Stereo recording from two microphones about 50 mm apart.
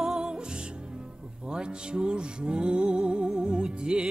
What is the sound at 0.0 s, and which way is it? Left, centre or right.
Music, centre.